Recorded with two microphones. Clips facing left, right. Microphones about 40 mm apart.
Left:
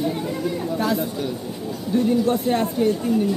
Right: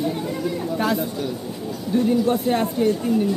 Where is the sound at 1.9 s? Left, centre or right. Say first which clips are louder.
Even; centre.